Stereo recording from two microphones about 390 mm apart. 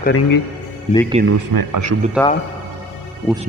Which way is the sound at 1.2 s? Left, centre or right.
Centre.